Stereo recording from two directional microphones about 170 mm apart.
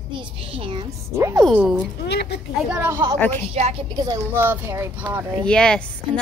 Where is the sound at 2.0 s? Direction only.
75° left (ahead or behind).